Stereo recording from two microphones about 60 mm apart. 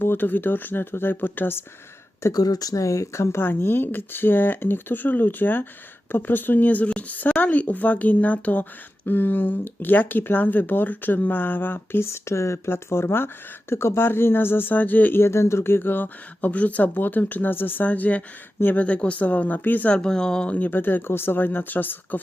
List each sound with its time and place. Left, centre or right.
0.0 s speech: left
2.3 s speech: left
3.4 s speech: left
15.2 s speech: left
20.0 s speech: centre; by 22.2 s left